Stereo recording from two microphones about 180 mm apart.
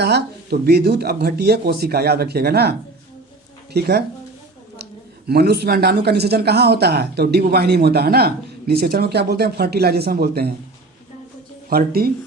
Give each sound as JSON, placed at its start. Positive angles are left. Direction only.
{"t": 0.0, "sound": "speech", "side_deg": -65}
{"t": 5.3, "sound": "speech", "side_deg": -60}
{"t": 11.7, "sound": "speech", "side_deg": -55}